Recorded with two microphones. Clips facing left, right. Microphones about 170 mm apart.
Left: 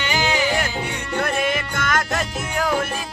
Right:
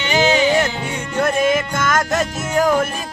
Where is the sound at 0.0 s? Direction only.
25° right (ahead or behind).